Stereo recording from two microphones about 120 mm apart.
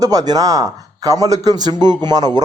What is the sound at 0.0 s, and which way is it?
Speech, 30° right (ahead or behind).